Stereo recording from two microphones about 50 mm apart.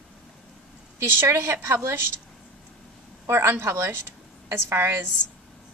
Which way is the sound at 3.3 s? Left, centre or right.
Right.